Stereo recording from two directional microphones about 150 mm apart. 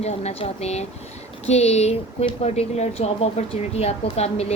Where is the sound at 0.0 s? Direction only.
45° left (ahead or behind).